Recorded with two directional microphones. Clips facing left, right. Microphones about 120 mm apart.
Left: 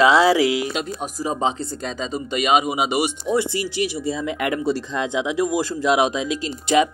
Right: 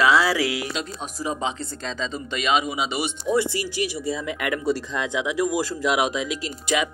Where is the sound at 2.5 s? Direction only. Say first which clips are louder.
Left 4 dB; 55° left (ahead or behind).